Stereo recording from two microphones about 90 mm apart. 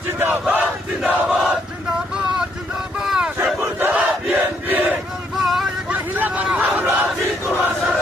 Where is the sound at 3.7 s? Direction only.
20° right (ahead or behind).